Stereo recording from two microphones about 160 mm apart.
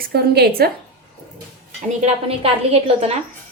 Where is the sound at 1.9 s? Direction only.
40° right (ahead or behind).